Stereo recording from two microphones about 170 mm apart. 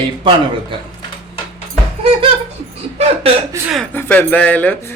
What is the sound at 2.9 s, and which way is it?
Hiccup, 35° right (ahead or behind).